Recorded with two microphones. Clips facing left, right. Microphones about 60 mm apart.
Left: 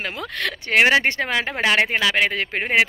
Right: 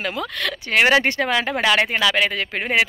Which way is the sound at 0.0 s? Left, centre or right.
Left.